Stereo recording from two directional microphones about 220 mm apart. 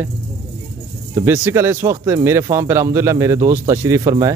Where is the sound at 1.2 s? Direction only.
10° right (ahead or behind).